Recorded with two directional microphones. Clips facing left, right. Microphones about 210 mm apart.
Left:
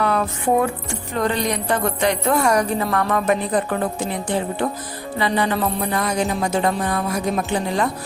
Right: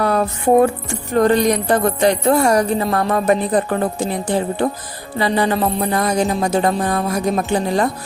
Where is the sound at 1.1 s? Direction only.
45° right (ahead or behind).